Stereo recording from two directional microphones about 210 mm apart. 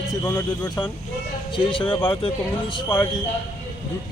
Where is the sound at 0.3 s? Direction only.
5° left (ahead or behind).